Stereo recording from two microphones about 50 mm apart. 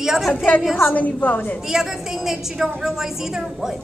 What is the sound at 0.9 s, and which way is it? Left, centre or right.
Speech, left.